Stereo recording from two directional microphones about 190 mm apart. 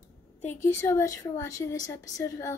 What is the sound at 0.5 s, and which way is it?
A woman's voice, 15° left (ahead or behind).